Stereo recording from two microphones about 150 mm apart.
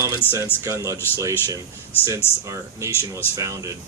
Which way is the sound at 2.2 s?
15° left (ahead or behind).